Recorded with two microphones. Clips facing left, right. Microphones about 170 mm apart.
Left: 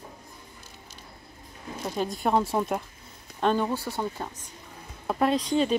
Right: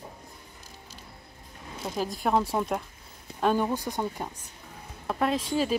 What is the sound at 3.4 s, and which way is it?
Speech, 10° right (ahead or behind).